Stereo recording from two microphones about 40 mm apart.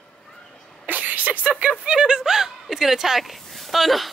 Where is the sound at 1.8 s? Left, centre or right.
Right.